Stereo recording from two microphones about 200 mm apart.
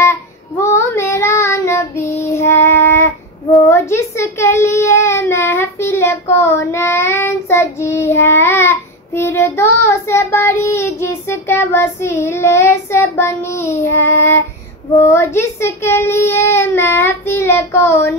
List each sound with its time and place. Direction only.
0.0 s child singing: 15° left (ahead or behind)